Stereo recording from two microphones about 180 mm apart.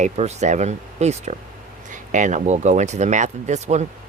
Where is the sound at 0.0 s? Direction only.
40° right (ahead or behind).